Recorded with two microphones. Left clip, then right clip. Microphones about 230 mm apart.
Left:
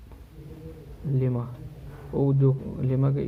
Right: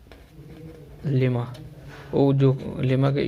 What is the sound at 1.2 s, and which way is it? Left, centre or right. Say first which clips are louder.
Speech: right 5 dB; right.